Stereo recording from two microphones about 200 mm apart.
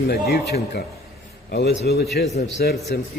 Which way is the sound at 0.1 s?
50° left (ahead or behind).